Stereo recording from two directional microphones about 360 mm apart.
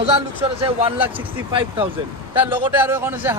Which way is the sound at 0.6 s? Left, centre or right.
Centre.